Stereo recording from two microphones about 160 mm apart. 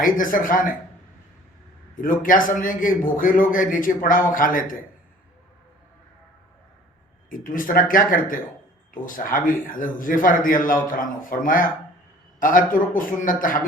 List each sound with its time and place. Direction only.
0.0 s a man's voice: 55° left (ahead or behind)
2.0 s a man's voice: 60° left (ahead or behind)
7.3 s a man's voice: 60° left (ahead or behind)